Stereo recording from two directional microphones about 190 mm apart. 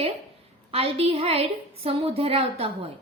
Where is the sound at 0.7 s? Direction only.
30° right (ahead or behind).